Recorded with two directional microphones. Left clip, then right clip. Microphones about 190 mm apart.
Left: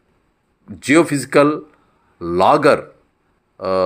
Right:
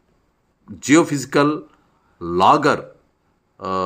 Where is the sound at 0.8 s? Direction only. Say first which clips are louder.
Left 1 dB; 5° right (ahead or behind).